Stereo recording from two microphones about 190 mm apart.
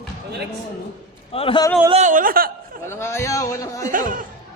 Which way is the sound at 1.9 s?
40° right (ahead or behind).